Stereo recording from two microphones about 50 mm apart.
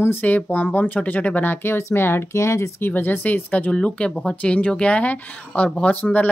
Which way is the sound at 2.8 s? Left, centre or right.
Left.